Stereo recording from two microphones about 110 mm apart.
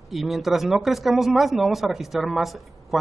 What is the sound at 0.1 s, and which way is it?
Speech, centre (ahead or behind).